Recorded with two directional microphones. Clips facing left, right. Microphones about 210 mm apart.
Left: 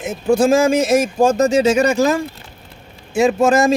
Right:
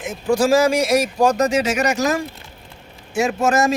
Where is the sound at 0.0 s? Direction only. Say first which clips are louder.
Left 3 dB; 25° left (ahead or behind).